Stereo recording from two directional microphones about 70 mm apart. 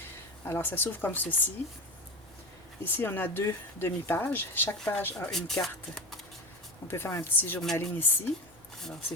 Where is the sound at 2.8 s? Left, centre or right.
Left.